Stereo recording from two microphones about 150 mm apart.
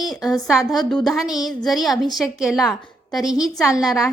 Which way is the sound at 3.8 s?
Centre (ahead or behind).